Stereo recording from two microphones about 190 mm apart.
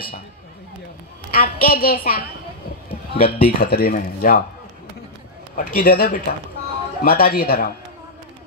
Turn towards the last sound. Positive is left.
turn(degrees=50)  # may be behind; listen again after turning